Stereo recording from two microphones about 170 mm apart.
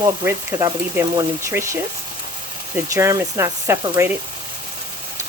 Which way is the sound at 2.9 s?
15° right (ahead or behind).